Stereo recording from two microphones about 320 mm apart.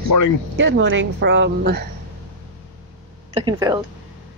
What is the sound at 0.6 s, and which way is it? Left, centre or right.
A woman's voice, right.